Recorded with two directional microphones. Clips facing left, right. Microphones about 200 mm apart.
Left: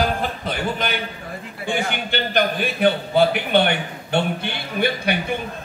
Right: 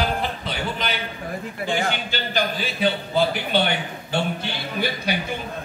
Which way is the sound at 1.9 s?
60° left (ahead or behind).